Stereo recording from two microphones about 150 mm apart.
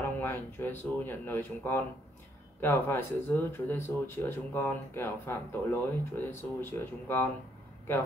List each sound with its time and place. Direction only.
0.0 s speech: 15° left (ahead or behind)